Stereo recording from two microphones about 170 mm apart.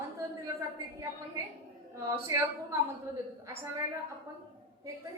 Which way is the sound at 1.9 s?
15° right (ahead or behind).